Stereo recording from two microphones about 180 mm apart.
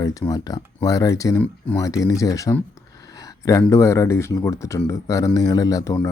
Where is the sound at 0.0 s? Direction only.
20° left (ahead or behind).